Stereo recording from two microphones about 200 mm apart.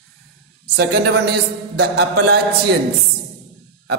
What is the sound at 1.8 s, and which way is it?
Speech, 55° right (ahead or behind).